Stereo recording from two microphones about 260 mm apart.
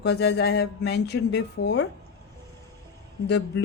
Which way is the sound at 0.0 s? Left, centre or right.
Left.